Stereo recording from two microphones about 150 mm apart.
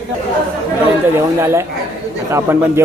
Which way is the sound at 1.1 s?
15° right (ahead or behind).